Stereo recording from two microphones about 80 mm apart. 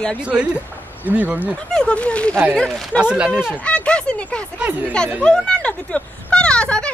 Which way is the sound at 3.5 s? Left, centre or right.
Centre.